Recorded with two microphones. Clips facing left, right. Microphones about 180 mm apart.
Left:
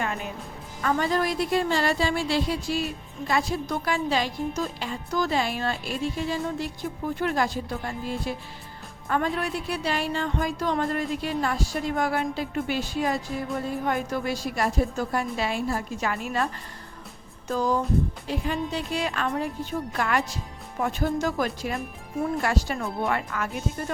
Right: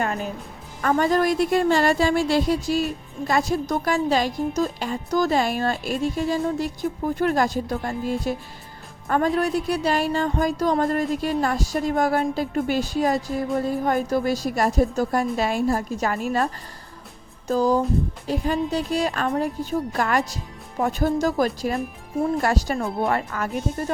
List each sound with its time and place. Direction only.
0.0 s music: 40° right (ahead or behind)
0.8 s a woman's voice: 45° right (ahead or behind)
9.0 s music: 40° right (ahead or behind)
17.5 s music: 35° right (ahead or behind)